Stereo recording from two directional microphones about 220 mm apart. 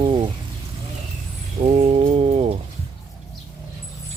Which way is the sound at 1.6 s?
30° right (ahead or behind).